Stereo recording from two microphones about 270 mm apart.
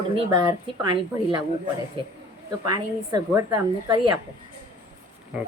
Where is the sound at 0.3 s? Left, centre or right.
Centre.